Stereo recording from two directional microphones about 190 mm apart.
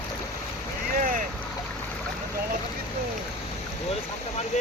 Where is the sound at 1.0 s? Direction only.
45° right (ahead or behind).